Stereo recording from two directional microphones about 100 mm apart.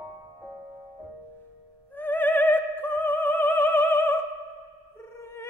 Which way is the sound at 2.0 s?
20° left (ahead or behind).